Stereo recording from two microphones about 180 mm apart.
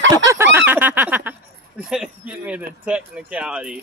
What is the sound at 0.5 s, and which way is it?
Speech, 10° right (ahead or behind).